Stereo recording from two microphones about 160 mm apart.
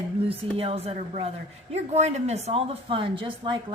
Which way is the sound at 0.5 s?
40° right (ahead or behind).